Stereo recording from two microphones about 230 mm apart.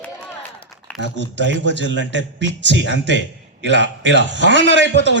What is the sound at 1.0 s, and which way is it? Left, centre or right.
A man's voice, right.